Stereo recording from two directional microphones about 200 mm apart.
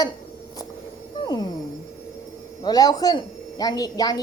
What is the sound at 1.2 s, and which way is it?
Music, 20° left (ahead or behind).